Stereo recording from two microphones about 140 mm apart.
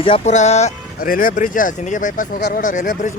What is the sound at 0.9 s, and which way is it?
Speech, 90° left.